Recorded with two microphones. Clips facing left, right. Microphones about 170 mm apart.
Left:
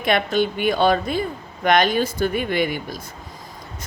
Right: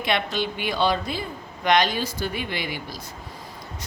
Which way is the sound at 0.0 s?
50° left (ahead or behind).